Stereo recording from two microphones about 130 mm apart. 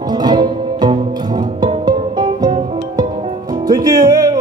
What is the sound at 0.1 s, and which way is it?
Music, 35° right (ahead or behind).